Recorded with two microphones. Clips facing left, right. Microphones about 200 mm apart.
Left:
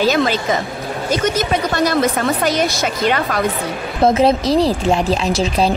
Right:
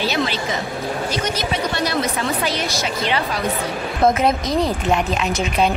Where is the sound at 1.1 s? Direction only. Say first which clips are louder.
Left 6 dB; 45° left (ahead or behind).